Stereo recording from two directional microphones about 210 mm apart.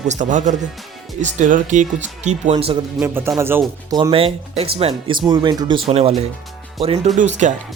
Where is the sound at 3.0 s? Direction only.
10° right (ahead or behind).